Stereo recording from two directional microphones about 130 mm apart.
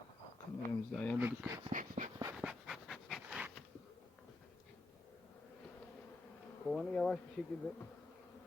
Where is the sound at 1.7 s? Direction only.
90° right.